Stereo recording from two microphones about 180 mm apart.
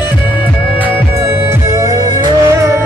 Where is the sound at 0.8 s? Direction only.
15° right (ahead or behind).